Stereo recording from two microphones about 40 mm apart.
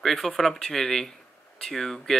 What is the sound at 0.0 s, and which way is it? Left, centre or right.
Speech, centre.